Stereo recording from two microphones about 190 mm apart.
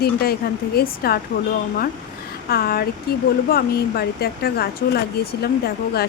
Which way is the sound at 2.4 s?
55° left (ahead or behind).